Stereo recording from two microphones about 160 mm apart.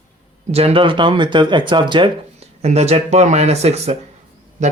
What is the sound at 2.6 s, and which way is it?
Speech, 45° right (ahead or behind).